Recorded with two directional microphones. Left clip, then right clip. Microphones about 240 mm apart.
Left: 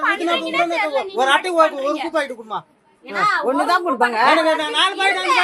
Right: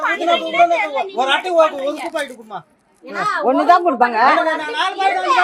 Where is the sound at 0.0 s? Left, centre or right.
Centre.